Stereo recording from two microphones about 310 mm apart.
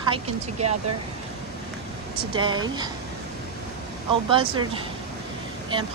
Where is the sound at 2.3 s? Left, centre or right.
Centre.